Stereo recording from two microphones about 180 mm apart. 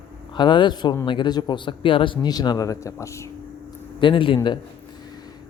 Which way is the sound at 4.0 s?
30° left (ahead or behind).